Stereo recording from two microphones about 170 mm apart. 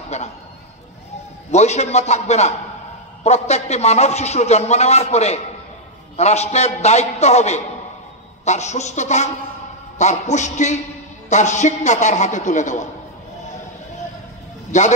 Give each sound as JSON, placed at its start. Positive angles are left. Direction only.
{"t": 0.1, "sound": "a man's voice", "side_deg": 40}
{"t": 1.5, "sound": "a man's voice", "side_deg": 40}
{"t": 14.7, "sound": "a man's voice", "side_deg": 45}